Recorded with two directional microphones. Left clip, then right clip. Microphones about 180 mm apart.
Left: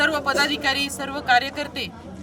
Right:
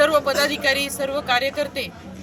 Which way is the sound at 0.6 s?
30° left (ahead or behind).